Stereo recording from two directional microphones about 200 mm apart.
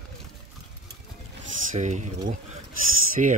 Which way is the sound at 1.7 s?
35° right (ahead or behind).